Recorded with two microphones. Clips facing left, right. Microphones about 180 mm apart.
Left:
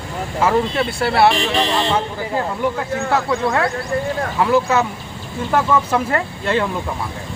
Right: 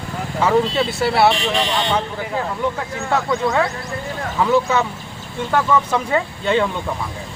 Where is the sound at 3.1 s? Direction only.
Centre (ahead or behind).